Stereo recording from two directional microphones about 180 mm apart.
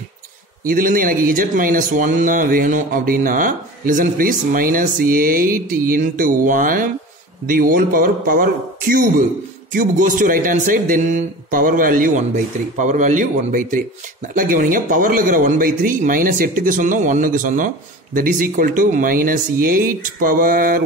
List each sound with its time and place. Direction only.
0.7 s speech: 50° right (ahead or behind)